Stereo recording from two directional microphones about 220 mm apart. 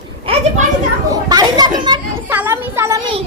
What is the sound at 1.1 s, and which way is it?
A child's voice, 20° right (ahead or behind).